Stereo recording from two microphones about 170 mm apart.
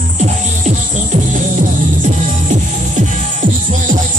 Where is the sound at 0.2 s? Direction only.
45° right (ahead or behind).